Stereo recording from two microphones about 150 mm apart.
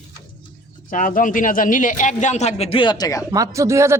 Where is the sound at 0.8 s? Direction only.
65° left (ahead or behind); by 3.2 s 25° left (ahead or behind).